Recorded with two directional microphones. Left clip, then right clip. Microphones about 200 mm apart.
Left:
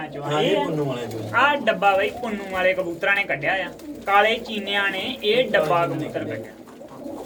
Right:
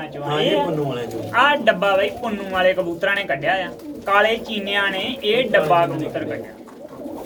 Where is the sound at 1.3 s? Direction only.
Centre (ahead or behind).